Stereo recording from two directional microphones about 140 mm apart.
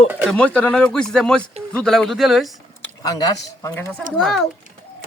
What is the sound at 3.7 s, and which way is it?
Speech, 10° left (ahead or behind).